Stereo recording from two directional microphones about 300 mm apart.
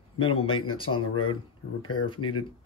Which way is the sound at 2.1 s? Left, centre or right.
Left.